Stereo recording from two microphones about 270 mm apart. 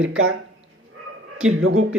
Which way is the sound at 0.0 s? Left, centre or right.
Right.